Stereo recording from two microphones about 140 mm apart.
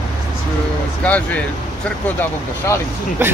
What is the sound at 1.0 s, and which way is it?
Speech, 10° left (ahead or behind).